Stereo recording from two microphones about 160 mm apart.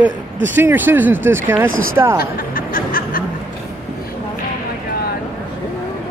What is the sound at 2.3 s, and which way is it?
Music, 60° left (ahead or behind).